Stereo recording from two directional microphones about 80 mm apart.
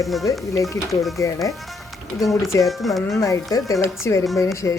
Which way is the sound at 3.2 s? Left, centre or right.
Left.